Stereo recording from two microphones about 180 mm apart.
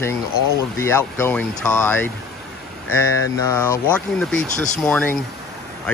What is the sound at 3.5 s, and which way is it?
Speech, 10° left (ahead or behind).